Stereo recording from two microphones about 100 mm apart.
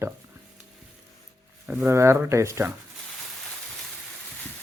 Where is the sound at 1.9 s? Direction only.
30° right (ahead or behind).